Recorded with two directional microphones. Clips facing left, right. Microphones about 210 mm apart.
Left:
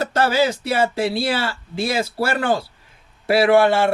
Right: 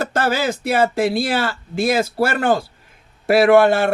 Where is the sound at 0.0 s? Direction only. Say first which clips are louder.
Left 1 dB; 50° right (ahead or behind).